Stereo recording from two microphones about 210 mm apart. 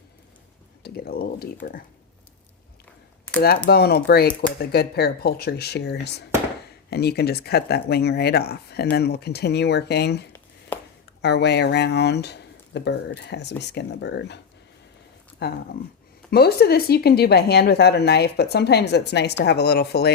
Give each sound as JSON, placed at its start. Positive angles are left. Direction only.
{"t": 0.9, "sound": "speech", "side_deg": 45}
{"t": 3.7, "sound": "speech", "side_deg": 50}
{"t": 10.7, "sound": "a sound", "side_deg": 10}
{"t": 11.2, "sound": "speech", "side_deg": 55}
{"t": 15.4, "sound": "speech", "side_deg": 50}